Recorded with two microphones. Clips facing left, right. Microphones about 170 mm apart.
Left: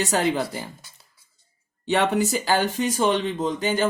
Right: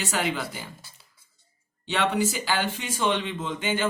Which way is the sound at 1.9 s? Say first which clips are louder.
Left 4 dB; 45° left (ahead or behind).